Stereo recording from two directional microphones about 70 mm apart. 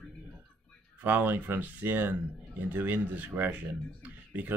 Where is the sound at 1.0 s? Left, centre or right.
Right.